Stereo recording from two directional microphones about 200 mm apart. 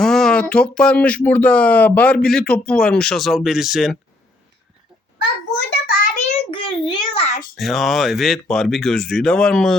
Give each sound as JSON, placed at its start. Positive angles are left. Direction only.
{"t": 0.0, "sound": "speech", "side_deg": 0}
{"t": 5.7, "sound": "child singing", "side_deg": 45}
{"t": 6.3, "sound": "a sound", "side_deg": 25}
{"t": 7.5, "sound": "speech", "side_deg": 0}